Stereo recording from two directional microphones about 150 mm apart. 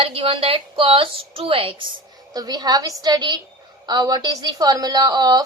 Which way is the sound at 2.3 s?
25° right (ahead or behind).